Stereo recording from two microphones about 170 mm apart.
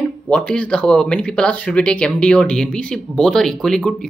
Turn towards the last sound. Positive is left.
turn(degrees=5)  # may be behind; listen again after turning